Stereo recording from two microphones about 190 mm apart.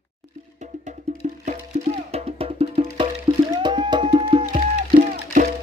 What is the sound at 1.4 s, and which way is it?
Music, 35° right (ahead or behind).